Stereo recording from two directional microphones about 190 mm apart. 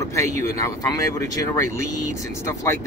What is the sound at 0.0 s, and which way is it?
Speech, 15° left (ahead or behind).